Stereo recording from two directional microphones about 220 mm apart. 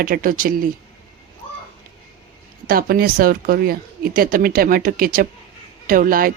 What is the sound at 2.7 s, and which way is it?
Speech, 40° right (ahead or behind).